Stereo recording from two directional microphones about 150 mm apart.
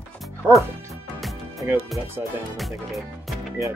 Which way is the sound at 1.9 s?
Centre (ahead or behind).